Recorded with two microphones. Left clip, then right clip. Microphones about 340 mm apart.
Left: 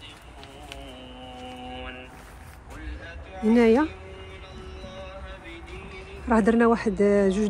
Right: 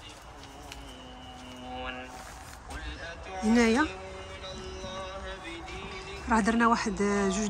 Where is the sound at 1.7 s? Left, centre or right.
Centre.